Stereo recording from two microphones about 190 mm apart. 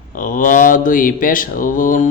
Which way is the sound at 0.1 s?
45° left (ahead or behind).